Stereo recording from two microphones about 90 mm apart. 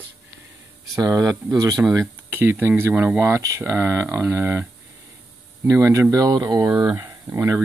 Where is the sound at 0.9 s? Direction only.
40° right (ahead or behind).